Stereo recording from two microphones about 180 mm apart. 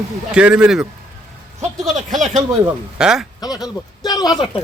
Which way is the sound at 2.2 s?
40° right (ahead or behind).